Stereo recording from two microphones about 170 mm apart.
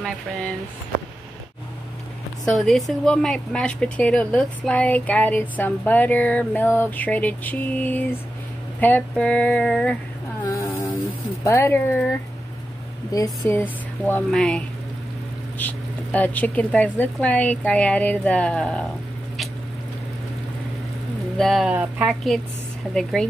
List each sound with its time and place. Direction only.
2.4 s a woman's voice: 5° left (ahead or behind)
10.5 s a sound: 20° left (ahead or behind)
11.4 s a woman's voice: 15° left (ahead or behind)
13.1 s a woman's voice: 15° left (ahead or behind)
21.4 s speech: centre (ahead or behind)